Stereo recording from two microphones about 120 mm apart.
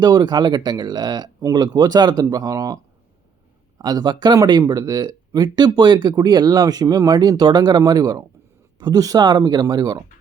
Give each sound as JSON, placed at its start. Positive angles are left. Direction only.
{"t": 0.0, "sound": "speech", "side_deg": -35}